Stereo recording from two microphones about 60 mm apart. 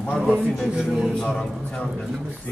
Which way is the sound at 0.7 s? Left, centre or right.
Centre.